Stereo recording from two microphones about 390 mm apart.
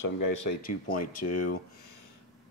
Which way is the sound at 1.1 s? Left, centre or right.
Left.